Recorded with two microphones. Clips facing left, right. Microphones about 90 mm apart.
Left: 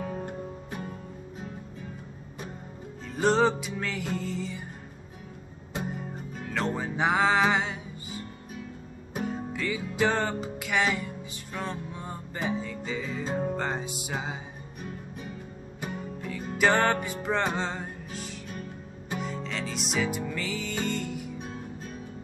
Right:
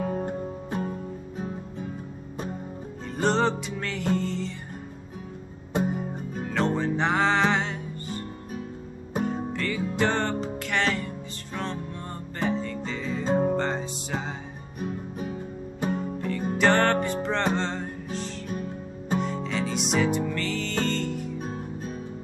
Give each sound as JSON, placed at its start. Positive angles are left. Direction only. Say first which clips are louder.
{"t": 0.0, "sound": "music", "louder": "right 6 dB", "side_deg": -45}
{"t": 0.3, "sound": "music", "louder": "right 6 dB", "side_deg": -30}
{"t": 3.2, "sound": "music", "louder": "left 1 dB", "side_deg": 5}
{"t": 6.5, "sound": "music", "louder": "right 5 dB", "side_deg": 5}
{"t": 9.2, "sound": "music", "louder": "right 3 dB", "side_deg": 5}
{"t": 13.2, "sound": "music", "louder": "right 8 dB", "side_deg": -30}
{"t": 13.6, "sound": "music", "louder": "right 3 dB", "side_deg": 10}
{"t": 15.9, "sound": "music", "louder": "right 7 dB", "side_deg": 5}